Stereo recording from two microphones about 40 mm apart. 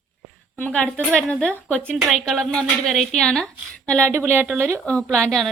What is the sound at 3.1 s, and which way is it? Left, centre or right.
Speech, centre.